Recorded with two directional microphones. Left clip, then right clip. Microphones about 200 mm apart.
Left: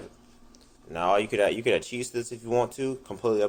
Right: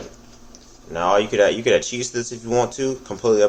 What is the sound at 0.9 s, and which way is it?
Speech, 45° left (ahead or behind).